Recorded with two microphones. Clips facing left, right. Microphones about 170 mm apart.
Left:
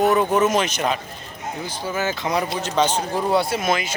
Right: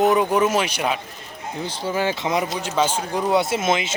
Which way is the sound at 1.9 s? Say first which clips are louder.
Right 1 dB; 25° right (ahead or behind).